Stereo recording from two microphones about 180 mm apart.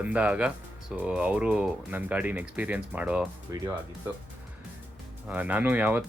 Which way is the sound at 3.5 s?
20° right (ahead or behind).